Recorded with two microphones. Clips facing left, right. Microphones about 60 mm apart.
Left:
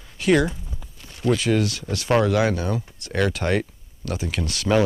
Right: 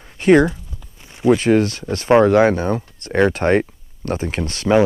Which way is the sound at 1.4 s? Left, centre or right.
Right.